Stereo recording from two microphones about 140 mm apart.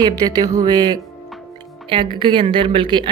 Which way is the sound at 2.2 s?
35° right (ahead or behind).